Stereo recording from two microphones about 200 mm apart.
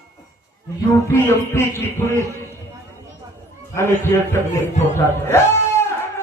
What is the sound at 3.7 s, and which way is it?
Music, 10° left (ahead or behind).